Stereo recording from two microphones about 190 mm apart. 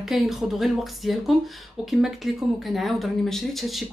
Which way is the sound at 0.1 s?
Centre (ahead or behind).